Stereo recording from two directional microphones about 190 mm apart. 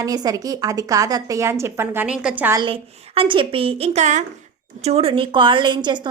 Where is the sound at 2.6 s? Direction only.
30° right (ahead or behind).